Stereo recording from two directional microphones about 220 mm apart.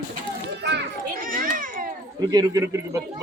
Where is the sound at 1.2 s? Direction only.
40° right (ahead or behind).